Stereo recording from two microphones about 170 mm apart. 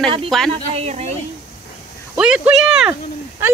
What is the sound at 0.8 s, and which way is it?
Speech, 40° right (ahead or behind).